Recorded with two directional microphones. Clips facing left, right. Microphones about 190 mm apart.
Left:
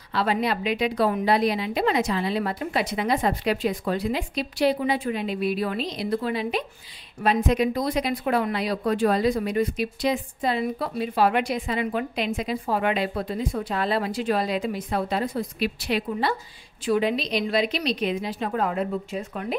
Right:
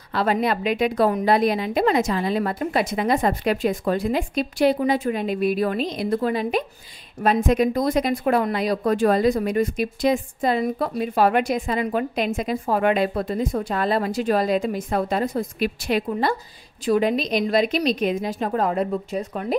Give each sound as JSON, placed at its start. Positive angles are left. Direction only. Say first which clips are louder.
{"t": 0.1, "sound": "speech", "louder": "right 3 dB", "side_deg": -45}